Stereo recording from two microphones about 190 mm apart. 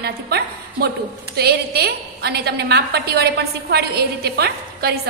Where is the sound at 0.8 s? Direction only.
55° right (ahead or behind).